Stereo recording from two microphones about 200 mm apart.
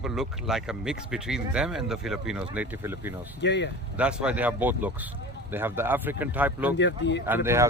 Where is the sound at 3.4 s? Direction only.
60° left (ahead or behind).